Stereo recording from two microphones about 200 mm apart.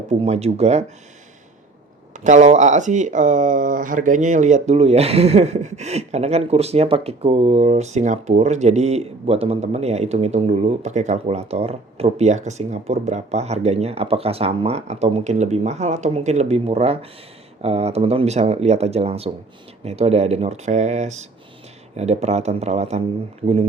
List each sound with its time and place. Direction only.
0.1 s speech: 35° right (ahead or behind)
2.1 s speech: 40° right (ahead or behind)